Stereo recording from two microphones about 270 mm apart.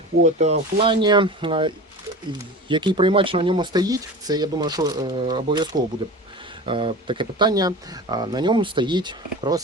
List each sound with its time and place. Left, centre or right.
0.2 s speech: right